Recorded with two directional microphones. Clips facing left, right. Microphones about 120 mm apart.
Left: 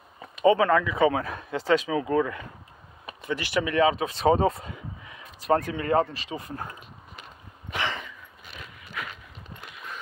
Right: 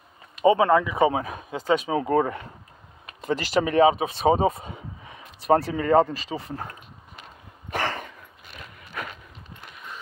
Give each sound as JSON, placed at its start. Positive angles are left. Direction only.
{"t": 0.5, "sound": "speech", "side_deg": -20}
{"t": 1.9, "sound": "speech", "side_deg": -35}
{"t": 7.7, "sound": "dog", "side_deg": -50}
{"t": 9.0, "sound": "horse", "side_deg": -40}